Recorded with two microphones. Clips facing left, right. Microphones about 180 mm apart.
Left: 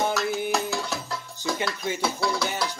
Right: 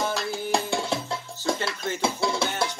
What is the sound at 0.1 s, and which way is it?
Music, 30° right (ahead or behind).